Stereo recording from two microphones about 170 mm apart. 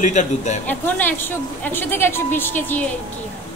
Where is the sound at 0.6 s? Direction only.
10° left (ahead or behind).